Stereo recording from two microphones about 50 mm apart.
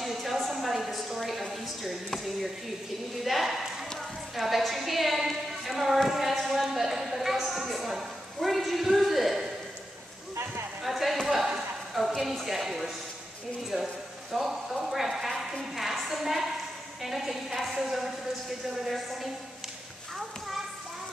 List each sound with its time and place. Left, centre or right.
0.0 s a sound: centre
4.4 s a woman's voice: centre
6.0 s a sound: centre
7.5 s a woman's voice: centre
10.8 s speech: centre
11.4 s a sound: centre
12.2 s a woman's voice: centre
14.3 s a woman's voice: centre
20.2 s children playing: centre